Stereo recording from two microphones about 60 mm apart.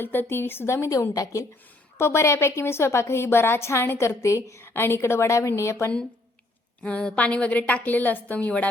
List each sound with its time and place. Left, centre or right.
0.0 s speech: left
1.1 s a woman's voice: left
2.0 s a woman's voice: left
4.7 s a woman's voice: left
6.8 s a woman's voice: centre